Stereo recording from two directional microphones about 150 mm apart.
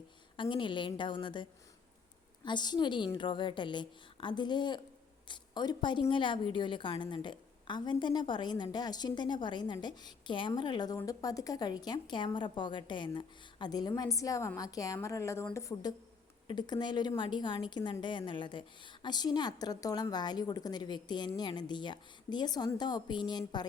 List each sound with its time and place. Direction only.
0.3 s a woman's voice: 35° left (ahead or behind)